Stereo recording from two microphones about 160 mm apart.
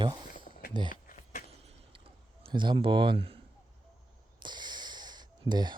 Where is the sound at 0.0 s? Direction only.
30° right (ahead or behind).